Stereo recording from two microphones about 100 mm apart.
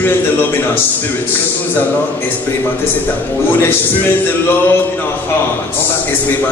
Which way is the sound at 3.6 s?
20° left (ahead or behind).